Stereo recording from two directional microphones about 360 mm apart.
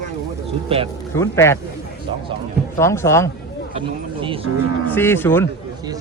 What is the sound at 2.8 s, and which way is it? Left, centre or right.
Speech, centre.